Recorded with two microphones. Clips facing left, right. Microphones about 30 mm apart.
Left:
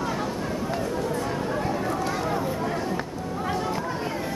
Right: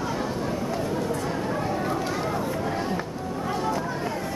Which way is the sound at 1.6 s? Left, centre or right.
Centre.